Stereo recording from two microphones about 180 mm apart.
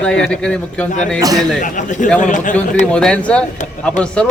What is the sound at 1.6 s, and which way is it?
Speech, 45° left (ahead or behind).